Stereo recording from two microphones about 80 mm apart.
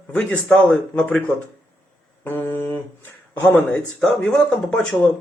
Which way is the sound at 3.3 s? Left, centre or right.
Left.